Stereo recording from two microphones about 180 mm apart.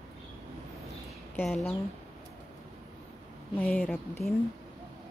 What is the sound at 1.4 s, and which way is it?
Speech, 5° left (ahead or behind).